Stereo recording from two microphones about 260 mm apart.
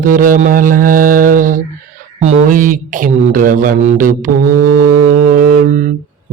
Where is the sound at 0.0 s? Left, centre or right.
Right.